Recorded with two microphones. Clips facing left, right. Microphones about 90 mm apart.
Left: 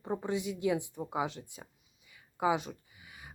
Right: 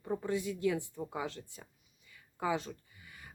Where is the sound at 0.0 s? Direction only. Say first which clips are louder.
Left 1 dB; 25° left (ahead or behind).